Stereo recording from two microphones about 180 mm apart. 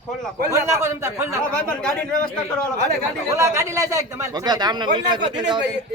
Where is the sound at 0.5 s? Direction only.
15° right (ahead or behind).